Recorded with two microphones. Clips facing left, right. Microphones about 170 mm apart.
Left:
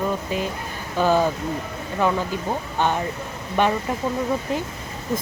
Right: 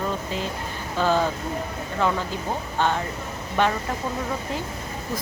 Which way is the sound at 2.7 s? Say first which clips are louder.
Left 1 dB; 15° left (ahead or behind).